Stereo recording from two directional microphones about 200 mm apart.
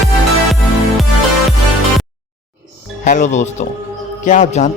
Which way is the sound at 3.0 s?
40° left (ahead or behind).